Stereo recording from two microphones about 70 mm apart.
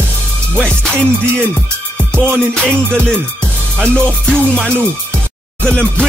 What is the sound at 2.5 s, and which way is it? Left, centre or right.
Music, centre.